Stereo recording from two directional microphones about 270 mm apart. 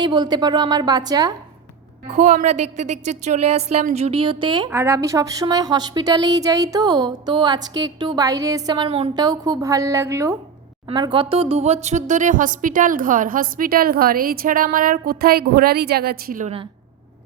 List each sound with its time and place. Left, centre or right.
0.0 s a woman's voice: centre
2.0 s a woman's voice: right